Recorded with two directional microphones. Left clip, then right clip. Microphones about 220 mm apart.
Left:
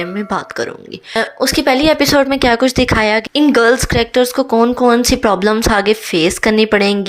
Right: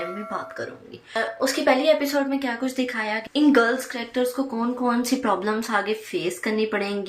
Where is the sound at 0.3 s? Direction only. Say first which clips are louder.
Left 11 dB; 40° left (ahead or behind).